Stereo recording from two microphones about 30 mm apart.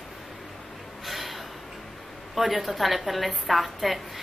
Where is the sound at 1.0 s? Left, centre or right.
Centre.